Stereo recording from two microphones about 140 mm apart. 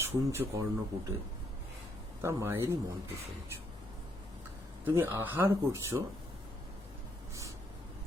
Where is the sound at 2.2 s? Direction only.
20° right (ahead or behind).